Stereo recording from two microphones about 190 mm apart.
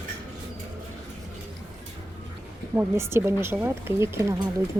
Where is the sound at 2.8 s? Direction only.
15° right (ahead or behind).